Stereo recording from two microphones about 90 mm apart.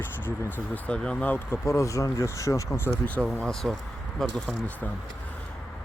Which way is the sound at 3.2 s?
5° left (ahead or behind).